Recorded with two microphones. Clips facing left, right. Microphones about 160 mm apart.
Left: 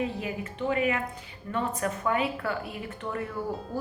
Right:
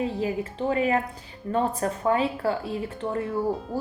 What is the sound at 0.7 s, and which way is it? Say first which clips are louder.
A woman's voice: right 3 dB; 35° right (ahead or behind).